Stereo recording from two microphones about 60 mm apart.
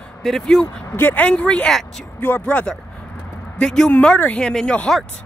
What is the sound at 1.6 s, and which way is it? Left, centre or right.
Speech, centre.